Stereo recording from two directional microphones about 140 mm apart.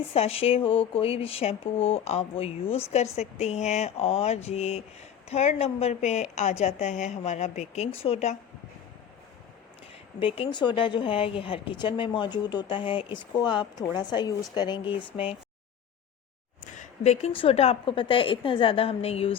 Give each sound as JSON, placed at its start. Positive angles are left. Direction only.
{"t": 0.1, "sound": "speech", "side_deg": 45}
{"t": 10.2, "sound": "a woman's voice", "side_deg": 40}
{"t": 16.7, "sound": "a woman's voice", "side_deg": 55}